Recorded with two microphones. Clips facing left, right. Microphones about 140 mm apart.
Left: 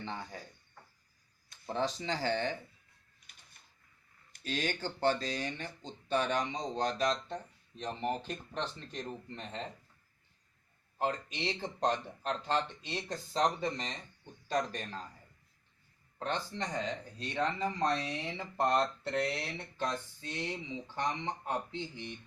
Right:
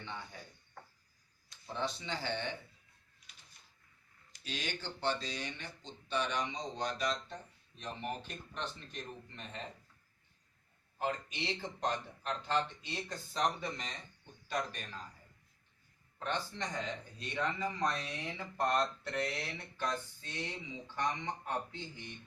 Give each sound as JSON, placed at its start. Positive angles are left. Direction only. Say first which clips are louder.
{"t": 0.0, "sound": "speech", "louder": "left 4 dB", "side_deg": 35}
{"t": 1.5, "sound": "a sound", "louder": "left 6 dB", "side_deg": 45}
{"t": 1.9, "sound": "speech", "louder": "left 5 dB", "side_deg": 40}
{"t": 4.3, "sound": "speech", "louder": "left 6 dB", "side_deg": 45}
{"t": 10.9, "sound": "speech", "louder": "left 3 dB", "side_deg": 30}
{"t": 16.1, "sound": "speech", "louder": "left 2 dB", "side_deg": 35}